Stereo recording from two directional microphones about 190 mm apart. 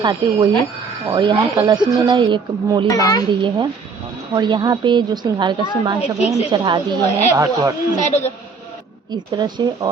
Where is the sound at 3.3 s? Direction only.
25° right (ahead or behind).